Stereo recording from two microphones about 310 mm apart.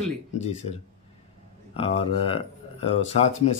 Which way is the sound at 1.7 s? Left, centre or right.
Centre.